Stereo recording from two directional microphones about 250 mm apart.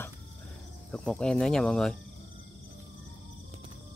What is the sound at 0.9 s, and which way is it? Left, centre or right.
Speech, centre.